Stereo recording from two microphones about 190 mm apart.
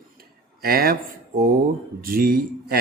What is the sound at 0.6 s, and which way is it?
Speech, 50° right (ahead or behind).